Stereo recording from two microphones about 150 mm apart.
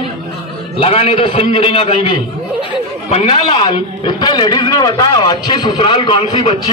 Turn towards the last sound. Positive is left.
turn(degrees=35)  # may be behind; listen again after turning